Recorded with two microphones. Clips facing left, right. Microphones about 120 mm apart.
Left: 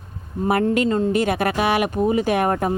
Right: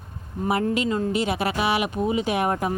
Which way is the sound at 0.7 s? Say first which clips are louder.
Left 5 dB; 50° left (ahead or behind).